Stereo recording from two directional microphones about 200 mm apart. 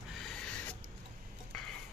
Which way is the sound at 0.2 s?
5° left (ahead or behind).